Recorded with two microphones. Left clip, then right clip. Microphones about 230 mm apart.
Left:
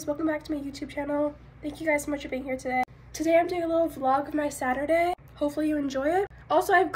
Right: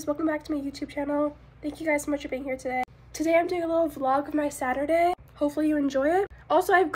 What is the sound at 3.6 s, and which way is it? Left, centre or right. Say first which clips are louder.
Speech: even; right.